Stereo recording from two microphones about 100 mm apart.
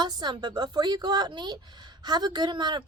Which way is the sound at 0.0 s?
45° right (ahead or behind).